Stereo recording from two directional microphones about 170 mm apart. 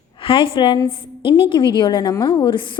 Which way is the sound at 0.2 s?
30° left (ahead or behind).